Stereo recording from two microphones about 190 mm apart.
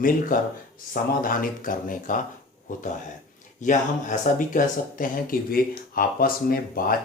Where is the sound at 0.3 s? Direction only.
45° left (ahead or behind).